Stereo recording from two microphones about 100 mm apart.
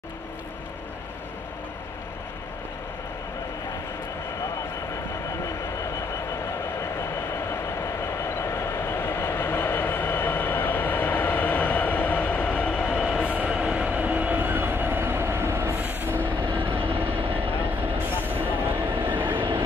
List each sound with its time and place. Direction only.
7.8 s train: 25° left (ahead or behind)
13.3 s train: 10° right (ahead or behind)
16.5 s vehicle: 20° right (ahead or behind)
17.9 s train: 20° right (ahead or behind)